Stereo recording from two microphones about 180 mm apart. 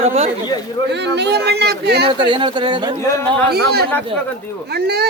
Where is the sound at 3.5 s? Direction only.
60° right (ahead or behind).